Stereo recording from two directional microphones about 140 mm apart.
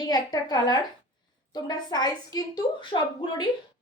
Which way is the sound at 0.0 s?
30° left (ahead or behind).